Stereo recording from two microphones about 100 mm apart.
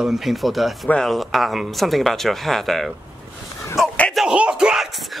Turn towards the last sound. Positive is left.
turn(degrees=-5)  # may be behind; listen again after turning